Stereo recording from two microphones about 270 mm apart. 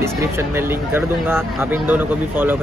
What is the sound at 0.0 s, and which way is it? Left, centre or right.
Speech, centre.